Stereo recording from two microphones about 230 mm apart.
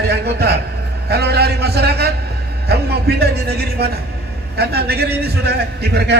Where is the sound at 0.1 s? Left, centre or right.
Right.